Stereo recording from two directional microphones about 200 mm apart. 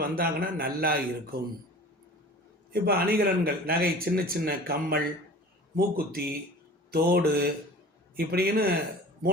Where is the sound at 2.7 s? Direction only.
50° right (ahead or behind).